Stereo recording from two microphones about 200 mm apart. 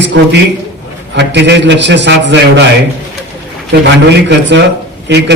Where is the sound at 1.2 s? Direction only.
60° right (ahead or behind).